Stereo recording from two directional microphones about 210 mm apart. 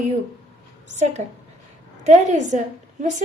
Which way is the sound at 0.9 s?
35° right (ahead or behind).